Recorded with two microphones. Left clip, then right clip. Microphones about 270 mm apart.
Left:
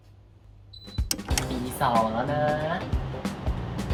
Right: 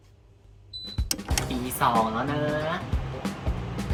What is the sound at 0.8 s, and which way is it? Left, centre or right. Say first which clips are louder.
Music: even; centre.